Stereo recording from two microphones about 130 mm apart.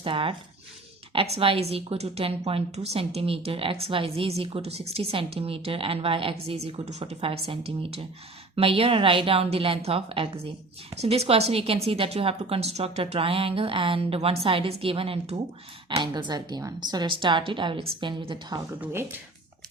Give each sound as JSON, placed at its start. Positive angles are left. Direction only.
{"t": 0.0, "sound": "speech", "side_deg": -45}
{"t": 16.0, "sound": "speech", "side_deg": -35}
{"t": 18.8, "sound": "speech", "side_deg": -15}